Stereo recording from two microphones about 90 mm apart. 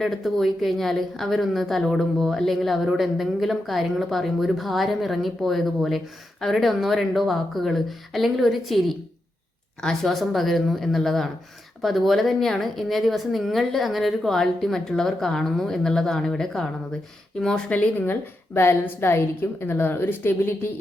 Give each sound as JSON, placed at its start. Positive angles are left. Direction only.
{"t": 0.0, "sound": "a woman's voice", "side_deg": 0}